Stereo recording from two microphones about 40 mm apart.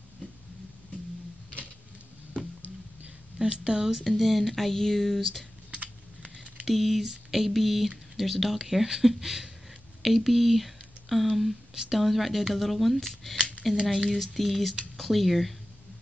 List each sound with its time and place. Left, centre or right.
3.5 s speech: right
4.0 s speech: centre
6.6 s speech: centre